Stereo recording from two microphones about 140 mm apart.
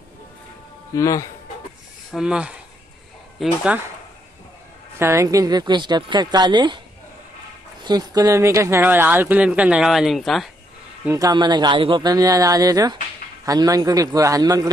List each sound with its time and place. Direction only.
0.9 s speech: 25° left (ahead or behind)
2.1 s speech: 5° right (ahead or behind)
4.9 s a woman's voice: 20° right (ahead or behind)
7.8 s speech: 30° right (ahead or behind); by 10.5 s centre (ahead or behind)
11.1 s a woman's voice: 25° right (ahead or behind)